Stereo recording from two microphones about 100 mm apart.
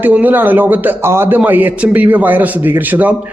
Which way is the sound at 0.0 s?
15° right (ahead or behind).